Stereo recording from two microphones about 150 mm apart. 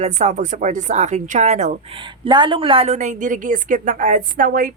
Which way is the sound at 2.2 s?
30° right (ahead or behind).